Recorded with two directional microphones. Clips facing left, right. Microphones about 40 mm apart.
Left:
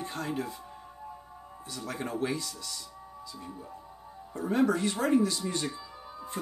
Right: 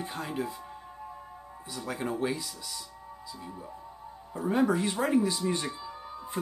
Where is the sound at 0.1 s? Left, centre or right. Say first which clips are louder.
Left 1 dB; centre.